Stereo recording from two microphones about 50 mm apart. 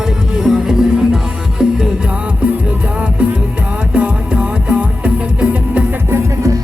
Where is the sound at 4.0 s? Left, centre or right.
Right.